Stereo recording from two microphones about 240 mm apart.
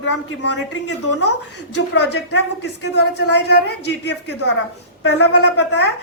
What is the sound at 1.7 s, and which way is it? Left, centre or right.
A woman's voice, left.